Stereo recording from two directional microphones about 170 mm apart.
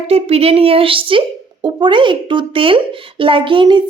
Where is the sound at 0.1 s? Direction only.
35° right (ahead or behind).